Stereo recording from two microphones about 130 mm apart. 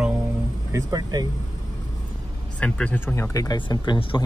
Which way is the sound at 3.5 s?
35° left (ahead or behind).